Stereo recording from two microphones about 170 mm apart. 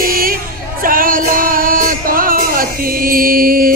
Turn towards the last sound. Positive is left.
turn(degrees=-60)  # may be behind; listen again after turning